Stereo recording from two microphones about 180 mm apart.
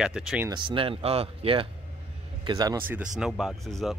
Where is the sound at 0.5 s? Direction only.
25° right (ahead or behind).